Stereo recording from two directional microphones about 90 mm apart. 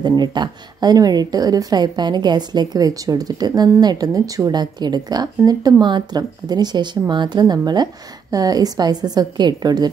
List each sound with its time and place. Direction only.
0.0 s speech: 50° right (ahead or behind)